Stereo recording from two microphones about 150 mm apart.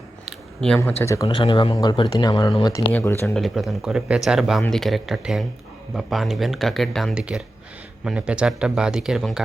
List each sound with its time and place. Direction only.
0.3 s a sound: 5° left (ahead or behind)
0.8 s speech: 20° left (ahead or behind)
1.3 s speech: 30° left (ahead or behind)
2.7 s speech: 20° left (ahead or behind)
3.3 s speech: centre (ahead or behind)